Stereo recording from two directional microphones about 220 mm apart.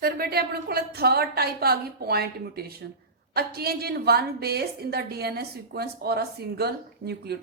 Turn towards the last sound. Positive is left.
turn(degrees=-45)  # may be behind; listen again after turning